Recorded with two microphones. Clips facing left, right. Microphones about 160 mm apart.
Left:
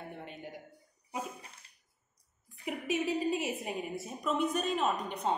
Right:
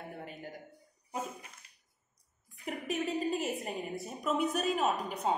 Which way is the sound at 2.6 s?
Centre (ahead or behind).